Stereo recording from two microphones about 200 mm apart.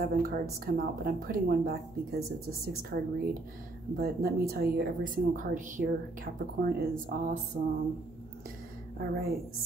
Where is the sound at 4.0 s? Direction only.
50° right (ahead or behind).